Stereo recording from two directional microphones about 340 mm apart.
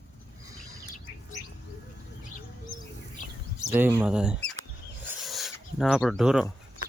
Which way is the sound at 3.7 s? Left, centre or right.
Centre.